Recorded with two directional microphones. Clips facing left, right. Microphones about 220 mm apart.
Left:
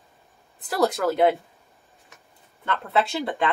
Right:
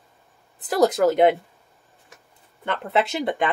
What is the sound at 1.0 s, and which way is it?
Speech, 20° right (ahead or behind).